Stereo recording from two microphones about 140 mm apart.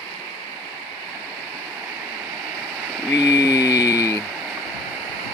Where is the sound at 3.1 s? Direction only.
25° left (ahead or behind).